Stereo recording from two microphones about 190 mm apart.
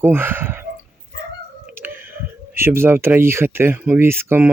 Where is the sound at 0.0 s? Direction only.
10° right (ahead or behind).